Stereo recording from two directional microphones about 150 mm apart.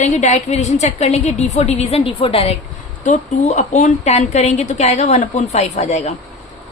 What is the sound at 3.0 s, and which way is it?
A woman's voice, 50° left (ahead or behind).